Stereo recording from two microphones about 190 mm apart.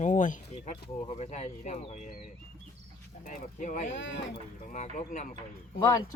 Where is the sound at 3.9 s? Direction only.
75° left (ahead or behind).